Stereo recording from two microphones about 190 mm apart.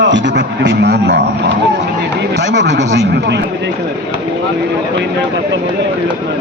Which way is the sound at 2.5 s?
65° right (ahead or behind).